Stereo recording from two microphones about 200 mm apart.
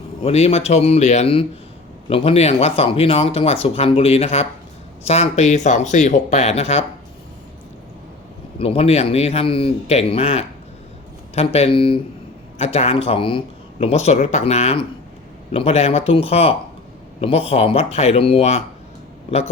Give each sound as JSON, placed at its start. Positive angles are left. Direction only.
{"t": 0.2, "sound": "speech", "side_deg": 30}
{"t": 8.5, "sound": "speech", "side_deg": 30}